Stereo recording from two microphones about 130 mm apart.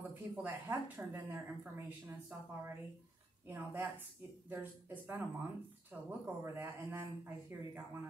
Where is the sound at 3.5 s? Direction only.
15° right (ahead or behind).